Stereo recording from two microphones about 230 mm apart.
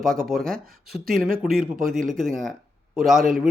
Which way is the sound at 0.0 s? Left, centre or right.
Centre.